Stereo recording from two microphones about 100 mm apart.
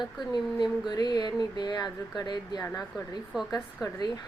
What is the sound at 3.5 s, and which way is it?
Speech, 40° left (ahead or behind).